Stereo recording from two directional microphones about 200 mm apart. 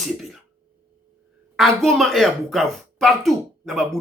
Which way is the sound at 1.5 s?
Centre (ahead or behind).